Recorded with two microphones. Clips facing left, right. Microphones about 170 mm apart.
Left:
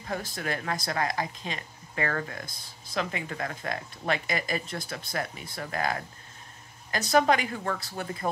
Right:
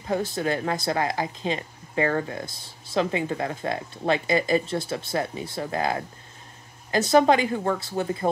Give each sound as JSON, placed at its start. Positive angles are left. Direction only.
{"t": 0.0, "sound": "speech", "side_deg": -25}